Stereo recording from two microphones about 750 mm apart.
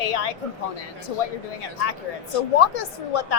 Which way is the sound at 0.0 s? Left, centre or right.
Left.